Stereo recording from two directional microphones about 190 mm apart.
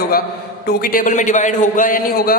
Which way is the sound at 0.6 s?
55° left (ahead or behind).